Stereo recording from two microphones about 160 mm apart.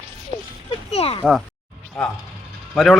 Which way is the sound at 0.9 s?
40° left (ahead or behind).